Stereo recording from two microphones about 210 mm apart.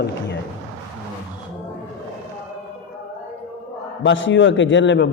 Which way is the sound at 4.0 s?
60° left (ahead or behind).